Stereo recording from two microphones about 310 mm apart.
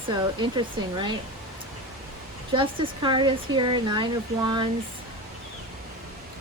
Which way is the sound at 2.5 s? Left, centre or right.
Centre.